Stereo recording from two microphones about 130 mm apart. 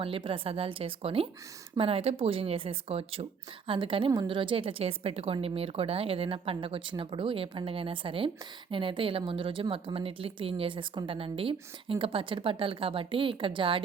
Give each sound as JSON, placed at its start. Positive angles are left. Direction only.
{"t": 0.0, "sound": "a woman's voice", "side_deg": -45}